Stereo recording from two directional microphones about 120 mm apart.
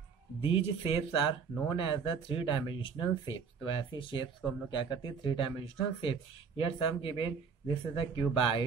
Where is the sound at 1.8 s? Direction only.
45° left (ahead or behind).